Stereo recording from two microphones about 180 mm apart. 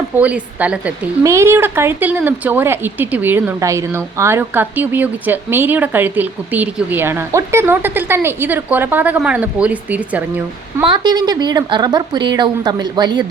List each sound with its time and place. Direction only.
0.2 s a woman's voice: 10° right (ahead or behind)
10.8 s a woman's voice: 25° right (ahead or behind)